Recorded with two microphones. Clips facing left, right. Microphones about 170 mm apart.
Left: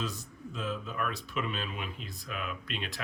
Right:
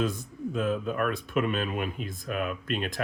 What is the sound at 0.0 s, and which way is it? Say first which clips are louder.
Speech: right 9 dB; 55° right (ahead or behind).